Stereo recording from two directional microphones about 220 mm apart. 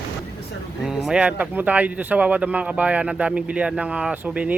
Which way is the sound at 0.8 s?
Centre (ahead or behind).